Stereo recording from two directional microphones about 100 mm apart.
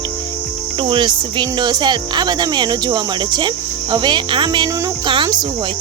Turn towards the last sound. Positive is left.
turn(degrees=-45)  # may be behind; listen again after turning